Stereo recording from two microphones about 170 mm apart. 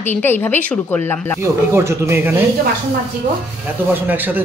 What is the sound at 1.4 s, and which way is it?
Speech, 15° right (ahead or behind).